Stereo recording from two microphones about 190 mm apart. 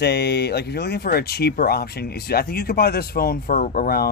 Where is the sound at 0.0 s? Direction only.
60° left (ahead or behind).